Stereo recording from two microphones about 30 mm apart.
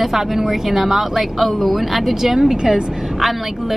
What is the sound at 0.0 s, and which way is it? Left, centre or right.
A woman's voice, centre.